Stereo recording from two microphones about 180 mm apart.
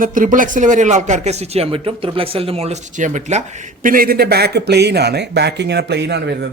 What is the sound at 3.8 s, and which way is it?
Speech, 55° right (ahead or behind).